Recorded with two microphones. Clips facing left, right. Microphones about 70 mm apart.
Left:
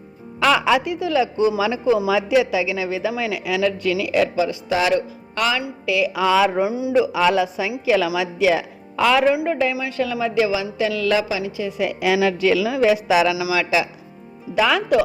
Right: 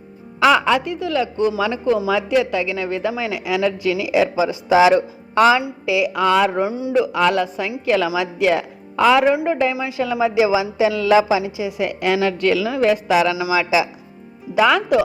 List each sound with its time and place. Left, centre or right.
0.3 s a woman's voice: centre
4.4 s speech: right
6.1 s a woman's voice: centre
11.8 s a woman's voice: centre